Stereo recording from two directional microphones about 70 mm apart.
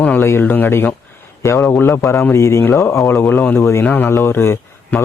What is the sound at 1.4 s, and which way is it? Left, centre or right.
Speech, left.